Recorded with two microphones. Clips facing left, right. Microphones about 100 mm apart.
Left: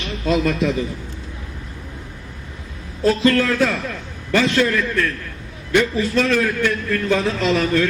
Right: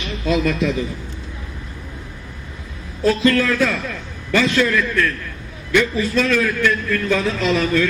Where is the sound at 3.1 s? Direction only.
35° left (ahead or behind).